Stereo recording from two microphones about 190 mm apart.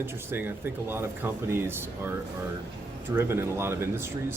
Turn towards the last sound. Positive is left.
turn(degrees=-15)  # may be behind; listen again after turning